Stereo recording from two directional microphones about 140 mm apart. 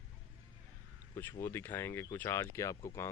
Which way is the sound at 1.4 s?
15° left (ahead or behind).